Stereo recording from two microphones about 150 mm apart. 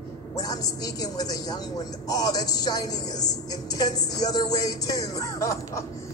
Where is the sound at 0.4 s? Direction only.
25° left (ahead or behind).